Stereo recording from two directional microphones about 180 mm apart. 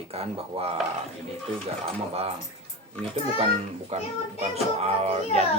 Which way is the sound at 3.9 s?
35° right (ahead or behind).